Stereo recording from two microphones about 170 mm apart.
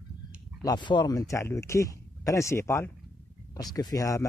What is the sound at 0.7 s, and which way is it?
Speech, 25° left (ahead or behind).